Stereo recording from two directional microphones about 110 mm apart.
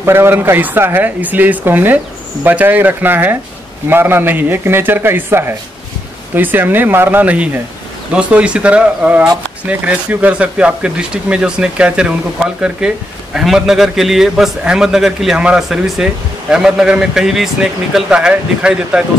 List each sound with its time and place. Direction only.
0.0 s a man's voice: 20° right (ahead or behind)